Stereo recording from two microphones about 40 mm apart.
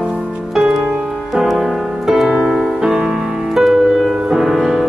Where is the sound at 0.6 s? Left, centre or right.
Centre.